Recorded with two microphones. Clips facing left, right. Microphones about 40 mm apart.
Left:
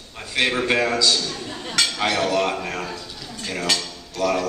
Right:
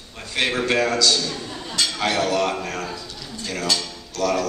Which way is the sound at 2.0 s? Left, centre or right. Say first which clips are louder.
Right 1 dB; centre.